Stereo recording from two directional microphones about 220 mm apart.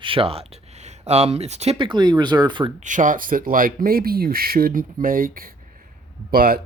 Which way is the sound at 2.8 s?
35° right (ahead or behind).